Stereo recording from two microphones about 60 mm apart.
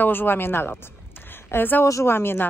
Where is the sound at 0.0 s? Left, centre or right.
Left.